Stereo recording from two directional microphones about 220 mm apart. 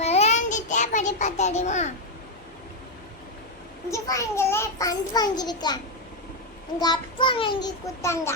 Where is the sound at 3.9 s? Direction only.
15° left (ahead or behind).